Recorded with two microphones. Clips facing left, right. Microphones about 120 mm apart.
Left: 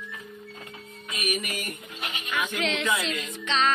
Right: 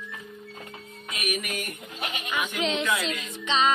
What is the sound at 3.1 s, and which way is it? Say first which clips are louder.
Music: right 1 dB; 10° right (ahead or behind).